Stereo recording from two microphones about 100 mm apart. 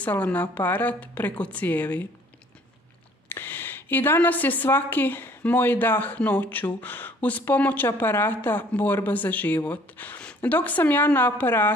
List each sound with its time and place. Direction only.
0.0 s speech: 15° left (ahead or behind)
3.3 s a woman's voice: 20° left (ahead or behind)